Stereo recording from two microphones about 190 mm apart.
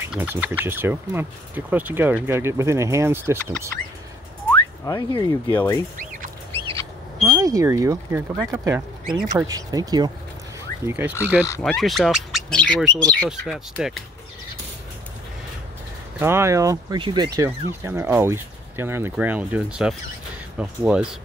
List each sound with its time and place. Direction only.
0.0 s speech: 10° right (ahead or behind)
4.5 s a sound: 20° left (ahead or behind)
5.5 s speech: 15° left (ahead or behind)
6.5 s bird: 15° left (ahead or behind)
7.2 s speech: 15° right (ahead or behind)
10.9 s speech: 10° right (ahead or behind)
16.2 s speech: 15° right (ahead or behind)